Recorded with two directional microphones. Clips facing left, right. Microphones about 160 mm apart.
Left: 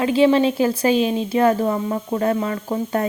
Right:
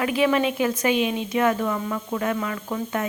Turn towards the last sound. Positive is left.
turn(degrees=35)  # may be behind; listen again after turning